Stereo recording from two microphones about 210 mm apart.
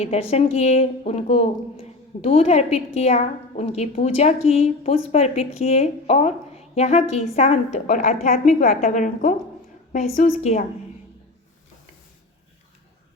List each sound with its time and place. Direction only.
0.0 s a woman's voice: 30° left (ahead or behind)